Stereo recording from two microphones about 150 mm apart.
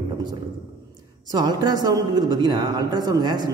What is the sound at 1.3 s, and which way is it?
Speech, 30° right (ahead or behind).